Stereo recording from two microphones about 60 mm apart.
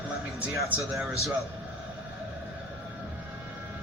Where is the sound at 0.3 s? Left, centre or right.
Right.